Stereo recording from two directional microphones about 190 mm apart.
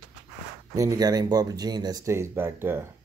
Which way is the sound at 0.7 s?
15° right (ahead or behind).